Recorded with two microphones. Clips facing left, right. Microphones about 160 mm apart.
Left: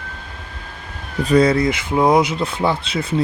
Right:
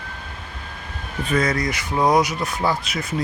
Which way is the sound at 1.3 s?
30° left (ahead or behind).